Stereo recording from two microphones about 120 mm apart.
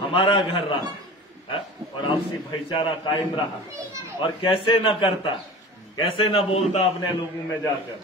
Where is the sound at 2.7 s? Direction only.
45° left (ahead or behind).